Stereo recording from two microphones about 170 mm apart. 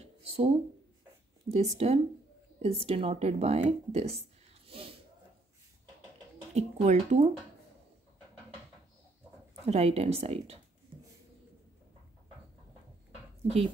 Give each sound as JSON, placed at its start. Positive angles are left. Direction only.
{"t": 0.0, "sound": "a sound", "side_deg": -35}
{"t": 1.5, "sound": "a woman's voice", "side_deg": -40}
{"t": 4.6, "sound": "a sound", "side_deg": -35}
{"t": 6.5, "sound": "a woman's voice", "side_deg": -40}
{"t": 9.7, "sound": "a woman's voice", "side_deg": -40}
{"t": 13.4, "sound": "speech", "side_deg": -35}